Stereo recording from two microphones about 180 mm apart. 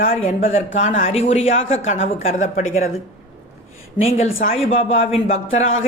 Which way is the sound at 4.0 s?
35° left (ahead or behind).